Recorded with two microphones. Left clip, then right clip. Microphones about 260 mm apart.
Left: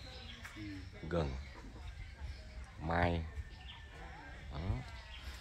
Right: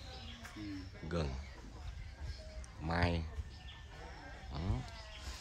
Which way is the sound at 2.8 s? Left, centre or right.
Centre.